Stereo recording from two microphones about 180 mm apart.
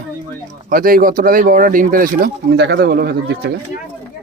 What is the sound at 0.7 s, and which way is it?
Speech, 50° right (ahead or behind).